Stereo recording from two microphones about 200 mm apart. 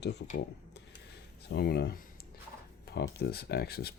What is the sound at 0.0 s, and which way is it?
Speech, 60° left (ahead or behind).